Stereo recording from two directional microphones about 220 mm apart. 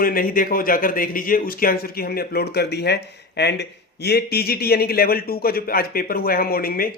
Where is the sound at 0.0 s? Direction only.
40° left (ahead or behind).